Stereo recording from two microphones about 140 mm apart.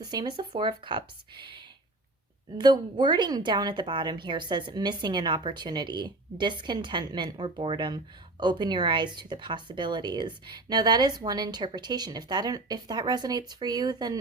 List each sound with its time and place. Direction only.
0.0 s a woman's voice: 30° right (ahead or behind)